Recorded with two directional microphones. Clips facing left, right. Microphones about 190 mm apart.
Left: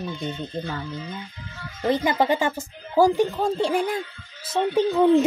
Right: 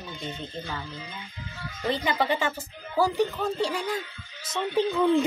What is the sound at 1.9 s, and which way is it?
Speech, 45° left (ahead or behind).